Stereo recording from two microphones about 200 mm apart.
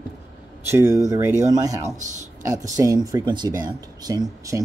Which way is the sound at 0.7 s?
15° right (ahead or behind).